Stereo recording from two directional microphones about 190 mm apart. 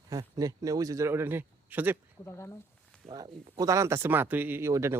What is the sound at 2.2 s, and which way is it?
Speech, 15° left (ahead or behind).